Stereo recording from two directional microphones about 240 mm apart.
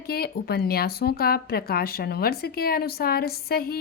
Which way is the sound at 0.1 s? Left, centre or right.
Left.